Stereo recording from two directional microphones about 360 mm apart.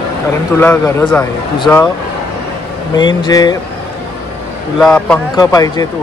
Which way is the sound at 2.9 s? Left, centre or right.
Centre.